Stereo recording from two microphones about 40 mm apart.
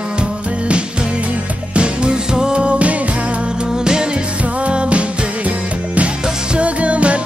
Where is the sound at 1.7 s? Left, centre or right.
Right.